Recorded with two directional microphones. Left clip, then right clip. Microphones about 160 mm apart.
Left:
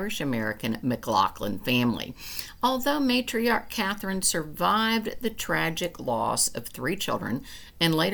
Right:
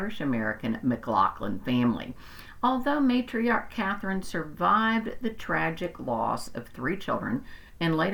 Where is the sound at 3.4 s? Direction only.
25° left (ahead or behind).